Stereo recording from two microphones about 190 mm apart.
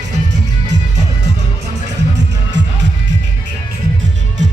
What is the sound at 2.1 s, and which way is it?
Music, 70° right (ahead or behind).